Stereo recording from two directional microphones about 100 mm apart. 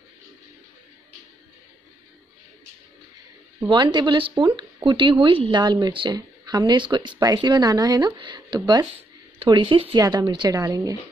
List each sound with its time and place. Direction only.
3.6 s speech: 45° right (ahead or behind)
9.9 s speech: 40° right (ahead or behind)
10.5 s speech: 35° right (ahead or behind)